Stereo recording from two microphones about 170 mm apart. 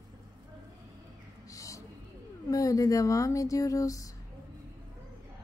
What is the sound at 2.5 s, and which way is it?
A woman's voice, 20° left (ahead or behind).